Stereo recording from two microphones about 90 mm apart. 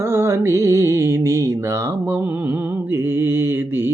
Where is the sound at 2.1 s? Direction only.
25° right (ahead or behind).